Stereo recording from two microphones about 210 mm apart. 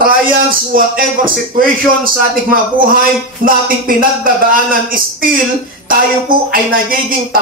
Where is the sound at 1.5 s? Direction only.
40° right (ahead or behind).